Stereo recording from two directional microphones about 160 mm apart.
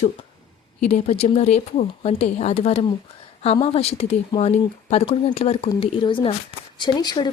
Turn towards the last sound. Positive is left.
turn(degrees=25)  # may be behind; listen again after turning